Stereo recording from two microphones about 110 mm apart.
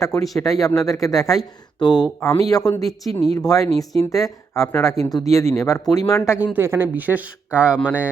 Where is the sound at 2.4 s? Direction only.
35° left (ahead or behind).